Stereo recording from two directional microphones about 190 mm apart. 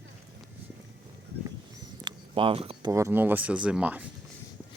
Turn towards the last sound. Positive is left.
turn(degrees=-5)  # may be behind; listen again after turning